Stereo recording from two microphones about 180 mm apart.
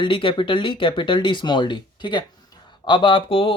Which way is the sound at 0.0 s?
30° left (ahead or behind).